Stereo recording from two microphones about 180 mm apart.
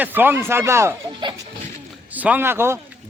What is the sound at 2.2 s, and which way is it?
Speech, 10° right (ahead or behind).